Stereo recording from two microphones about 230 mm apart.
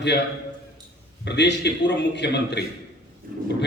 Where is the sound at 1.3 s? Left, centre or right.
Left.